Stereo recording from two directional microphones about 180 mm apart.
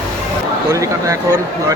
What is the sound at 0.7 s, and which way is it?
Speech, 15° right (ahead or behind).